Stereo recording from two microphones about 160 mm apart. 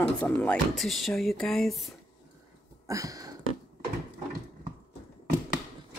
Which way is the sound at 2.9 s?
20° right (ahead or behind).